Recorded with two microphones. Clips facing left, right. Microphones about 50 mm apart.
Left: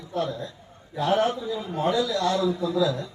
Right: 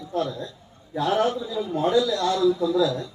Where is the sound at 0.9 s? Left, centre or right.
Left.